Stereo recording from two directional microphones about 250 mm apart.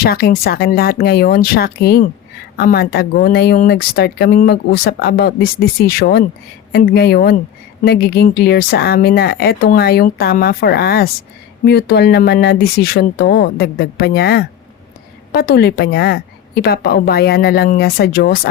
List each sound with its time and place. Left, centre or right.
0.0 s speech: left